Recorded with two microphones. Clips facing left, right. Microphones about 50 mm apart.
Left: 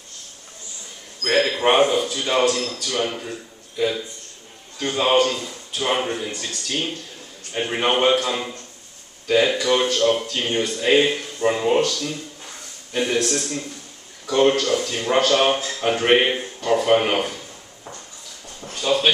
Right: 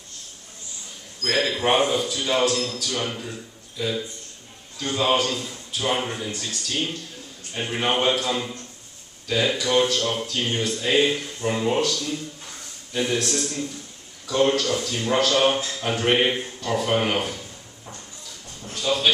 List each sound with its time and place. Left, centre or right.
1.2 s speech: centre
1.6 s a man's voice: left
4.9 s speech: left
5.3 s speech: centre
8.0 s speech: left
8.3 s speech: centre
9.3 s speech: left
18.6 s speech: left